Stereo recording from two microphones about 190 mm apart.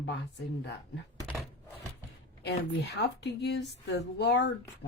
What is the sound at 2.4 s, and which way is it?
A woman's voice, 60° left (ahead or behind).